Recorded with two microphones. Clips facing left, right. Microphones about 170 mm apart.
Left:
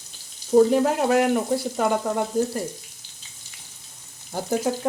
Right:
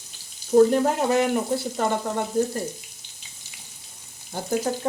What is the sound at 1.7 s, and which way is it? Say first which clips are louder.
Frying: left 2 dB; 5° left (ahead or behind).